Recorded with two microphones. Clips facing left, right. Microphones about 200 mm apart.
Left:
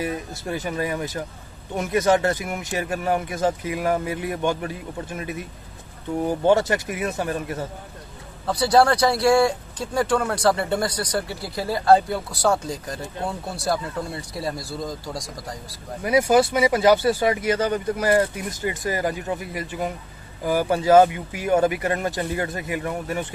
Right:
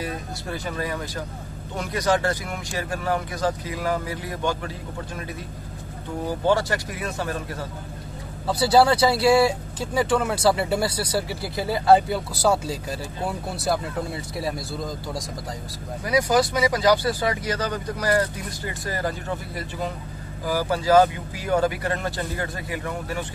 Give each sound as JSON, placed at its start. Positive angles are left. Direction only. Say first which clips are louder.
{"t": 0.0, "sound": "speech", "louder": "left 3 dB", "side_deg": 20}
{"t": 8.5, "sound": "speech", "louder": "even", "side_deg": -5}
{"t": 13.6, "sound": "speech", "louder": "even", "side_deg": 0}
{"t": 16.3, "sound": "speech", "louder": "left 3 dB", "side_deg": 25}